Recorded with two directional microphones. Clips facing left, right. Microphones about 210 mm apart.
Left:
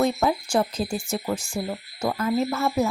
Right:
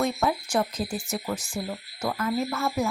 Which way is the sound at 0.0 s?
30° left (ahead or behind).